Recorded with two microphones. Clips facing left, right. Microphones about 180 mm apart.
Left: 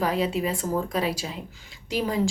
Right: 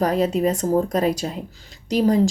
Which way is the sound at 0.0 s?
45° right (ahead or behind).